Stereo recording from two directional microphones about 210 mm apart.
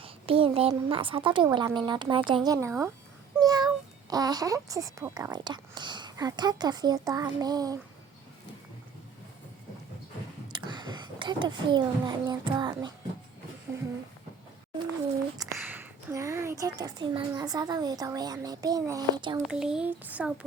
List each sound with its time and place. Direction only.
0.0 s speech: 25° right (ahead or behind)
3.4 s a sound: 20° right (ahead or behind)
4.1 s speech: 20° right (ahead or behind)
10.5 s speech: 20° right (ahead or behind)
15.4 s a woman's voice: 15° right (ahead or behind)
19.4 s speech: 5° right (ahead or behind)